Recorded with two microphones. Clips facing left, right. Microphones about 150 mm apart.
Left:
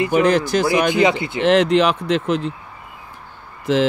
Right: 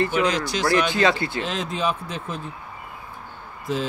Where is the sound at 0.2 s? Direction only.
60° left (ahead or behind).